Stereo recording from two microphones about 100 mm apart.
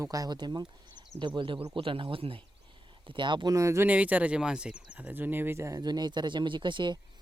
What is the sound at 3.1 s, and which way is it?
Speech, 55° right (ahead or behind).